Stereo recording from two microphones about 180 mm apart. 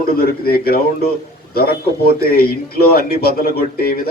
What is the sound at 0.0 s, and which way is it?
A man's voice, 55° left (ahead or behind).